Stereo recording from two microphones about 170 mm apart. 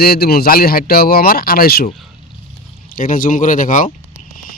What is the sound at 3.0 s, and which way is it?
Speech, 55° left (ahead or behind).